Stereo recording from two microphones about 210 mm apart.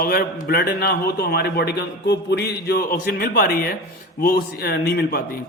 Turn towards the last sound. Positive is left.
turn(degrees=50)  # may be behind; listen again after turning